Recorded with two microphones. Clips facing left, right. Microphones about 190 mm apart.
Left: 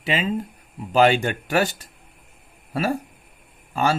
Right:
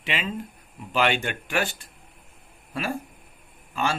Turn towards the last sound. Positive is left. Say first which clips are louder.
# left 5 dB
turn(degrees=40)  # may be behind; listen again after turning